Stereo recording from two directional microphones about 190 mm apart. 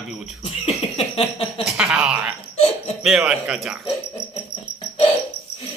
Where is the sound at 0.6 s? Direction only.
30° left (ahead or behind).